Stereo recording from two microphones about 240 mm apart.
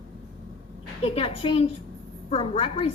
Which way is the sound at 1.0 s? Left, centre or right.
Left.